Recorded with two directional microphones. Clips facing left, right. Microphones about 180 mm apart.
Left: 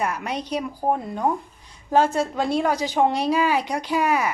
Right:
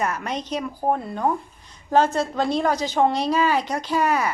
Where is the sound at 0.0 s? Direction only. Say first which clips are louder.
Even; 10° left (ahead or behind).